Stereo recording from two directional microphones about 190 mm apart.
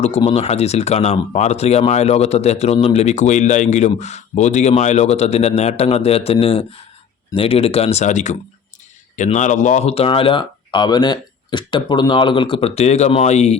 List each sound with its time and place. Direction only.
0.2 s speech: 30° left (ahead or behind)